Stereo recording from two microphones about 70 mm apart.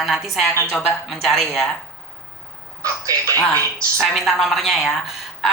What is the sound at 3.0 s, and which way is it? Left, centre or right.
Speech, right.